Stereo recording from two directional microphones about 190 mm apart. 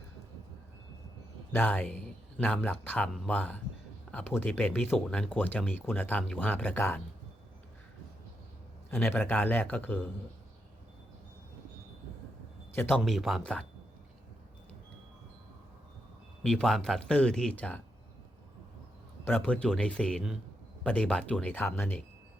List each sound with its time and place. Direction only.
1.5 s speech: 10° left (ahead or behind)
8.9 s speech: 10° left (ahead or behind)
12.7 s speech: 10° left (ahead or behind)
13.0 s speech: centre (ahead or behind)
16.4 s speech: 5° left (ahead or behind)
19.2 s speech: 10° left (ahead or behind)